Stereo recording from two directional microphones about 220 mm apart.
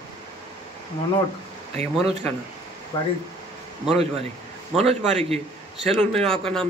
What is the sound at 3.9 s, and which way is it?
A man's voice, 30° right (ahead or behind).